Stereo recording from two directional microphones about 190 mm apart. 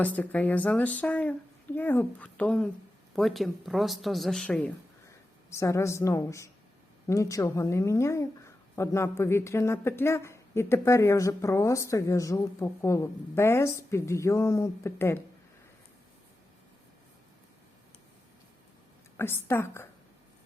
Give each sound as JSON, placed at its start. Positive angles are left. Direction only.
{"t": 0.0, "sound": "speech", "side_deg": 10}
{"t": 19.1, "sound": "speech", "side_deg": 10}